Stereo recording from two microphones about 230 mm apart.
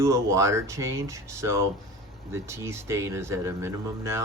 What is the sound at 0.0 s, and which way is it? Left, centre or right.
Speech, centre.